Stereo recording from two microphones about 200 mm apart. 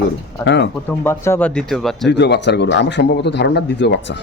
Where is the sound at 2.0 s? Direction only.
60° left (ahead or behind).